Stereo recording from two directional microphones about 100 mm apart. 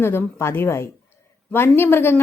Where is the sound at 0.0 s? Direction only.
25° left (ahead or behind).